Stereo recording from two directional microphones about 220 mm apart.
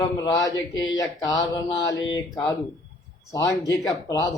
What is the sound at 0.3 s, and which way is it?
A man's voice, 15° left (ahead or behind).